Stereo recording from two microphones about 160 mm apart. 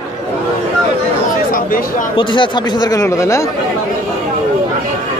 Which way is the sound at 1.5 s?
60° left (ahead or behind).